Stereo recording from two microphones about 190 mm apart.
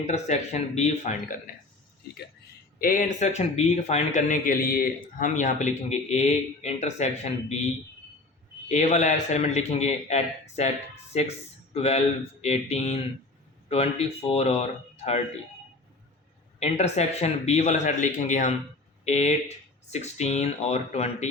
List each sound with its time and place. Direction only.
0.0 s speech: 35° left (ahead or behind)
2.7 s speech: 50° left (ahead or behind)
8.7 s speech: 40° left (ahead or behind)
16.6 s speech: 35° left (ahead or behind)